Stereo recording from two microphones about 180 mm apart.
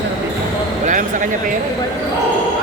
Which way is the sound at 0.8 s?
45° right (ahead or behind).